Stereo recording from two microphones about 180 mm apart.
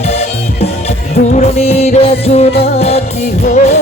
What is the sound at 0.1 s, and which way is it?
Music, 35° left (ahead or behind).